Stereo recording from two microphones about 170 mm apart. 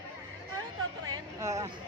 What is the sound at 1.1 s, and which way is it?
Speech, 20° right (ahead or behind).